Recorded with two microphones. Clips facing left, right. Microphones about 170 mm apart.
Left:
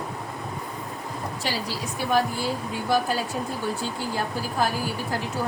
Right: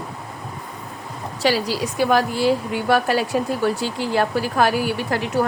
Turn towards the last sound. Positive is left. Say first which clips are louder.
# right 6 dB
turn(degrees=-75)  # may be behind; listen again after turning